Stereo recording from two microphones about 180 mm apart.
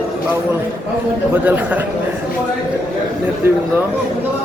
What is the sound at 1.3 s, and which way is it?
Speech, 10° right (ahead or behind).